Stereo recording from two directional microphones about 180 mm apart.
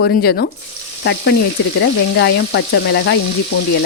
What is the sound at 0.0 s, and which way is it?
Frying, 70° left (ahead or behind).